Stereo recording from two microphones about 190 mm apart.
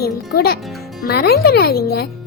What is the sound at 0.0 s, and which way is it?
A child's voice, 55° left (ahead or behind).